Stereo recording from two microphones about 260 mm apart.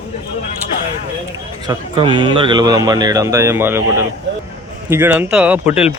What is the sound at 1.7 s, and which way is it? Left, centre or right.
Speech, centre.